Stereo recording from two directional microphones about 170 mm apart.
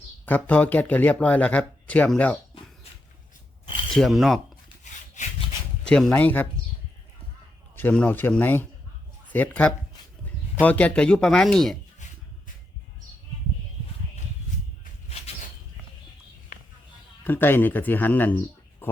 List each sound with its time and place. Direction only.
0.3 s speech: 10° left (ahead or behind)
3.8 s speech: centre (ahead or behind)
5.8 s speech: 5° left (ahead or behind)
7.8 s speech: 10° left (ahead or behind)
17.2 s speech: 10° left (ahead or behind)